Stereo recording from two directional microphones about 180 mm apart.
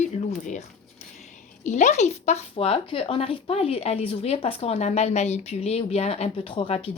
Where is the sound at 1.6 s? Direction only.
40° left (ahead or behind).